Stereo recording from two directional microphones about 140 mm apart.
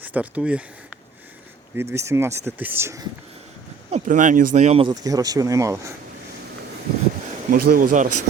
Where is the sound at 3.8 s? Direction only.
60° right (ahead or behind).